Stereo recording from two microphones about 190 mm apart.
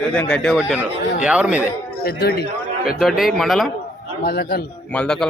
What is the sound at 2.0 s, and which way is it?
Speech, 55° left (ahead or behind).